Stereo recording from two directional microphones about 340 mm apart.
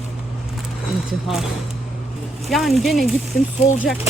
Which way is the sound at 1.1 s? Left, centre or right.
Centre.